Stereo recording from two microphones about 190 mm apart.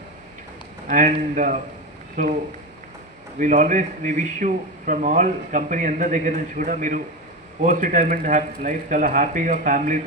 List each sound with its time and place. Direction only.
0.9 s speech: 45° right (ahead or behind)
3.3 s a man's voice: 40° right (ahead or behind)